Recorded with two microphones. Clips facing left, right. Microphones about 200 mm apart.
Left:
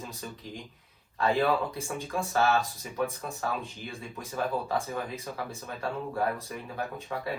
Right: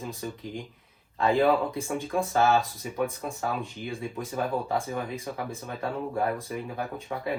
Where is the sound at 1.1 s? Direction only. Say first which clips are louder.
Right 3 dB; 15° right (ahead or behind).